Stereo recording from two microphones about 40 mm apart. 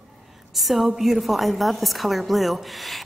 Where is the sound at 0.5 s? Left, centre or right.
Centre.